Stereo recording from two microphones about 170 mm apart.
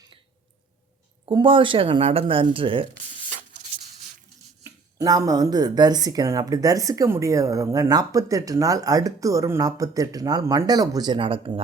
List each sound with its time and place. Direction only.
1.2 s speech: 30° right (ahead or behind)
4.6 s speech: 20° right (ahead or behind)